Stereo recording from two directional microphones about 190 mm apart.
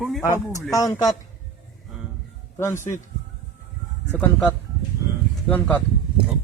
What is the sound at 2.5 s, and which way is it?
Speech, 15° left (ahead or behind).